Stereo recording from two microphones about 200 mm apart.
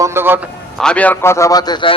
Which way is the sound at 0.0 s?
10° right (ahead or behind).